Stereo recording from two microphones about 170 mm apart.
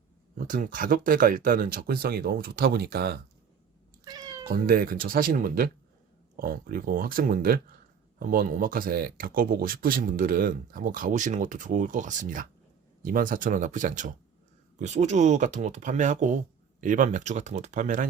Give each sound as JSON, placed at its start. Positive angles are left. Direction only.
{"t": 0.3, "sound": "speech", "side_deg": -50}
{"t": 4.0, "sound": "cat", "side_deg": -20}
{"t": 4.4, "sound": "speech", "side_deg": -60}